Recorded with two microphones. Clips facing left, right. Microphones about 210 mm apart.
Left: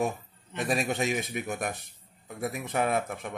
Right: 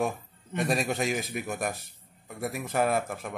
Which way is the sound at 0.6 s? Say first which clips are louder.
Right 1 dB; centre (ahead or behind).